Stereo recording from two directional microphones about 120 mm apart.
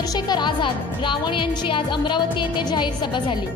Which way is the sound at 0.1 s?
35° left (ahead or behind).